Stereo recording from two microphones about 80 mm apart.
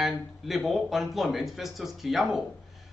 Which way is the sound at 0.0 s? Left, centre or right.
Centre.